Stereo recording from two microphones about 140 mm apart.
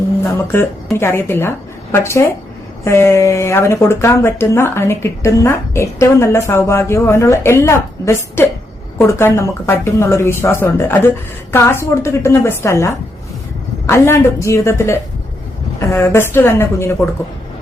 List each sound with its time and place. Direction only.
0.9 s speech: 15° left (ahead or behind)